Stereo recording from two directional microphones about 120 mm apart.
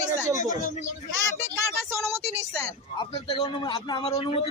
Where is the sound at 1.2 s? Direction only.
20° right (ahead or behind).